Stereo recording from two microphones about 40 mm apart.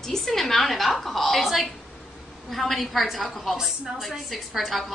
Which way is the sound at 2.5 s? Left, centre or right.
Centre.